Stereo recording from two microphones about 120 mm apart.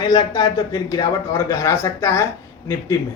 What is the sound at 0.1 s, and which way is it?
Speech, 30° left (ahead or behind).